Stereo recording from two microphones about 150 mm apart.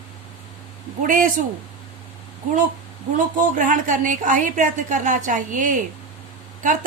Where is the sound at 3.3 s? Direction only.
60° right (ahead or behind).